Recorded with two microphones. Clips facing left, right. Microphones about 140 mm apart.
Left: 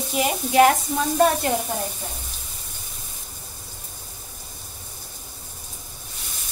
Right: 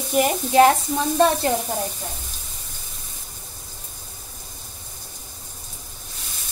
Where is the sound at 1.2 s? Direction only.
30° right (ahead or behind).